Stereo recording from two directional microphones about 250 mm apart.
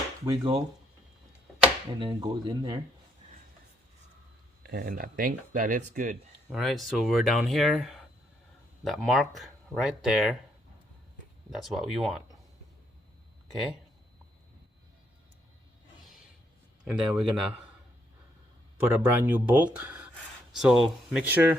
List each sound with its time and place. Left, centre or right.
0.3 s speech: centre
2.0 s speech: centre
4.6 s speech: right
6.5 s speech: centre
11.5 s speech: centre
16.8 s speech: centre
18.9 s speech: centre